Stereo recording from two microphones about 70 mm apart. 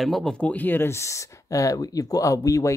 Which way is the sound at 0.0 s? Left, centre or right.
Centre.